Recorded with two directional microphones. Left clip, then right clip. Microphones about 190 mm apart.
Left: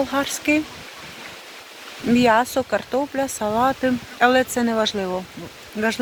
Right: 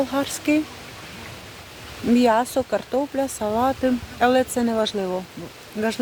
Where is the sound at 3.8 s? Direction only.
5° left (ahead or behind).